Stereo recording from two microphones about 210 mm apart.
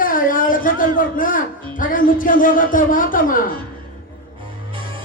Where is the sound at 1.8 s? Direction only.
40° left (ahead or behind).